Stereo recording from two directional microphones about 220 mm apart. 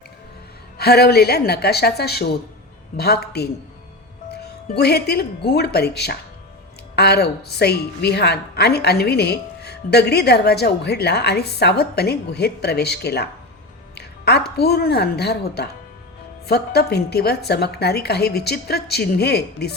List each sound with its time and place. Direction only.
0.8 s a woman's voice: 45° left (ahead or behind)
13.9 s music: 50° left (ahead or behind)
14.5 s a woman's voice: 45° left (ahead or behind)